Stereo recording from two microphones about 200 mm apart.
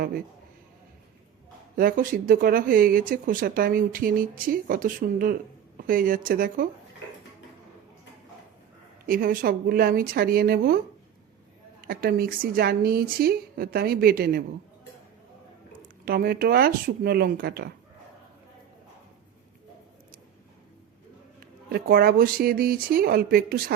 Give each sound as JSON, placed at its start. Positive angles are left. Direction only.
{"t": 1.7, "sound": "speech", "side_deg": -45}
{"t": 9.0, "sound": "speech", "side_deg": -45}
{"t": 11.9, "sound": "speech", "side_deg": -50}
{"t": 16.0, "sound": "speech", "side_deg": -50}
{"t": 21.7, "sound": "speech", "side_deg": -50}